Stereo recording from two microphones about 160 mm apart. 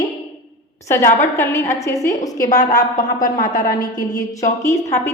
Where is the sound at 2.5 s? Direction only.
50° left (ahead or behind).